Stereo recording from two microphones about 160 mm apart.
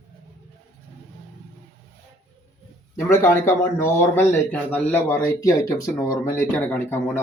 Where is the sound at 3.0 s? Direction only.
15° left (ahead or behind).